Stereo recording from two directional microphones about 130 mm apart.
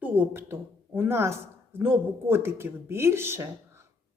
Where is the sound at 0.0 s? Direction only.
15° right (ahead or behind).